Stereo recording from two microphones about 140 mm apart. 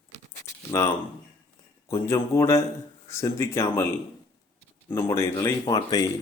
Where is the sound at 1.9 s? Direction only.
20° left (ahead or behind).